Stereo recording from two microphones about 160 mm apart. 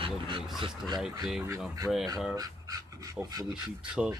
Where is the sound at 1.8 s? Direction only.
10° left (ahead or behind).